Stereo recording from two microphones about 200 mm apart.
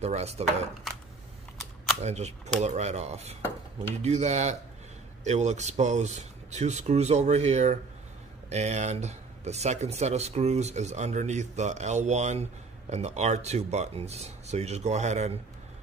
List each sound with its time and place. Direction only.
0.0 s speech: 30° right (ahead or behind)
2.0 s speech: 35° right (ahead or behind)